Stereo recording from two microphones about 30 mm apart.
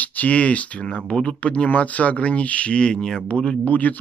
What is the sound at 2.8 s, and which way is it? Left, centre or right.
Speech, left.